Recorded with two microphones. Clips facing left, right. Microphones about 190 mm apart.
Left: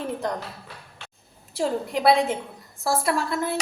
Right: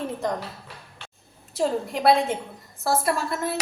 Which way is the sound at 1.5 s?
Centre (ahead or behind).